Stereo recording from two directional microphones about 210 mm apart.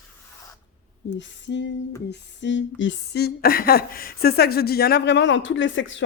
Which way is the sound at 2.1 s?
55° left (ahead or behind).